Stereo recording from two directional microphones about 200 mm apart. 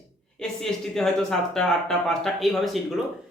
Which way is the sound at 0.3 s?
Centre (ahead or behind).